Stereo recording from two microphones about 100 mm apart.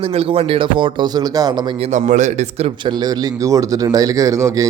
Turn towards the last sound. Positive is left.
turn(degrees=-35)  # may be behind; listen again after turning